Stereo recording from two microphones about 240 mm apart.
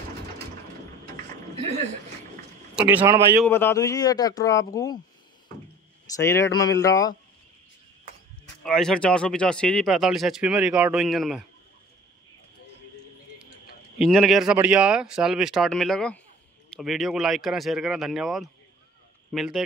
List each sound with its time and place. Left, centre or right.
1.5 s a sound: right
2.7 s speech: centre
3.4 s speech: centre
6.0 s speech: centre
8.6 s speech: centre
13.9 s speech: centre